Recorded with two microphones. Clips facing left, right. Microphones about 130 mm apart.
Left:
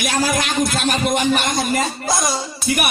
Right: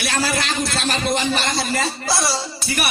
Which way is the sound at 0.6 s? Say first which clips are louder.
Left 3 dB; 45° left (ahead or behind).